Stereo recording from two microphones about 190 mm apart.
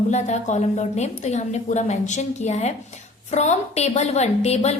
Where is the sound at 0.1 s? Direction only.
40° left (ahead or behind).